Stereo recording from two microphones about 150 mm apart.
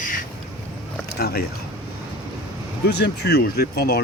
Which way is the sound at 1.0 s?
90° left.